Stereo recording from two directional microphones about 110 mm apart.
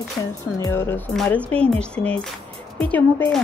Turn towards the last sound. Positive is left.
turn(degrees=15)  # may be behind; listen again after turning